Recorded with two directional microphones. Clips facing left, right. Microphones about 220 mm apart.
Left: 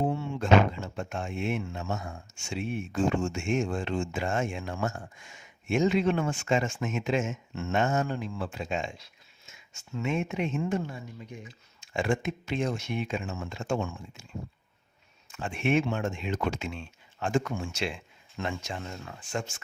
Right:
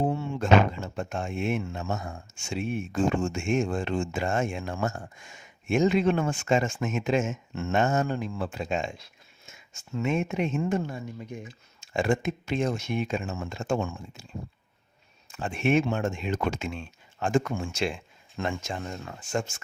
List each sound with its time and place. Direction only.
0.0 s speech: 40° right (ahead or behind)
15.3 s speech: 35° right (ahead or behind)